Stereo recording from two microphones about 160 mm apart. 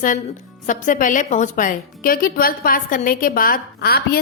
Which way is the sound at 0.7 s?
55° left (ahead or behind).